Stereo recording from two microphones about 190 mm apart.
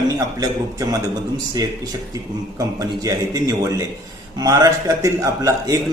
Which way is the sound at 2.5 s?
20° right (ahead or behind).